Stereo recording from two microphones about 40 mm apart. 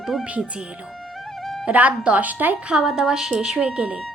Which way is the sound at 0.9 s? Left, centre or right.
Centre.